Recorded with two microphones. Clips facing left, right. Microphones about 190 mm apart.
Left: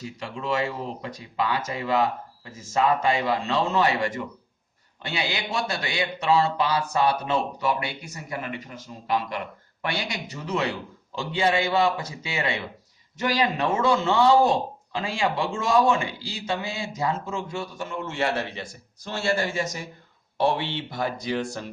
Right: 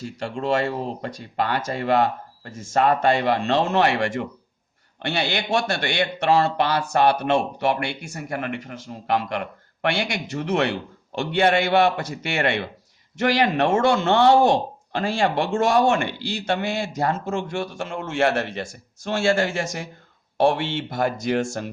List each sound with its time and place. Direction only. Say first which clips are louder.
0.0 s speech: right 5 dB; 65° right (ahead or behind)
8.1 s speech: right 5 dB; 50° right (ahead or behind)
9.8 s speech: right 6 dB; 80° right
18.4 s speech: right 5 dB; 45° right (ahead or behind)
19.0 s speech: right 5 dB; 85° right
20.5 s speech: right 3 dB; 50° right (ahead or behind)